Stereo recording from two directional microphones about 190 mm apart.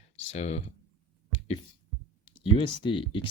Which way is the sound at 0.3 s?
35° left (ahead or behind).